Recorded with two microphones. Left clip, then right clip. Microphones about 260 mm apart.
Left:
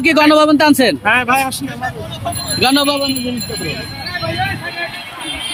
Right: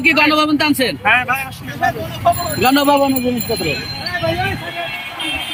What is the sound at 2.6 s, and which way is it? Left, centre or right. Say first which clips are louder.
Speech: right 1 dB; centre.